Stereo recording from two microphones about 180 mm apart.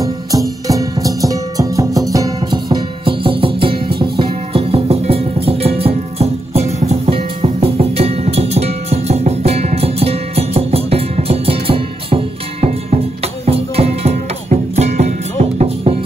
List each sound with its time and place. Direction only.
0.0 s music: 20° right (ahead or behind); by 16.0 s 35° right (ahead or behind)